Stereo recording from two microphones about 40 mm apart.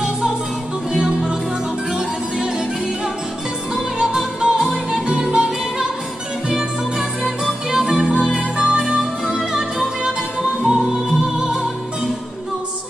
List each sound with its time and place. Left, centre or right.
3.7 s music: centre
9.3 s music: centre
10.7 s music: centre